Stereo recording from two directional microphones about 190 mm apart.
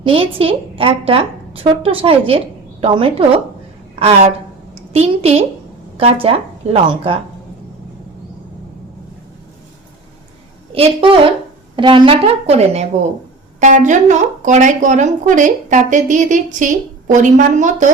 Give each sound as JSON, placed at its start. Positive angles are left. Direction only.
{"t": 0.0, "sound": "a woman's voice", "side_deg": -30}
{"t": 10.7, "sound": "a woman's voice", "side_deg": -30}